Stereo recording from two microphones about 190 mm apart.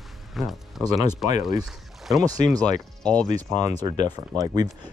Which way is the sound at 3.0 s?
5° left (ahead or behind).